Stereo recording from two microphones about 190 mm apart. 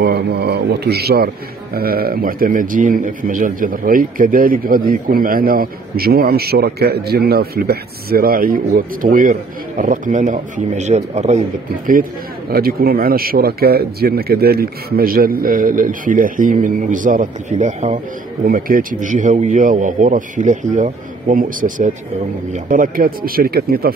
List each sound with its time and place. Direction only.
0.0 s a man's voice: 55° right (ahead or behind)